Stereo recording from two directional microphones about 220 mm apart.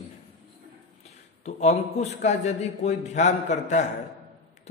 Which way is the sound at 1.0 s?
30° left (ahead or behind).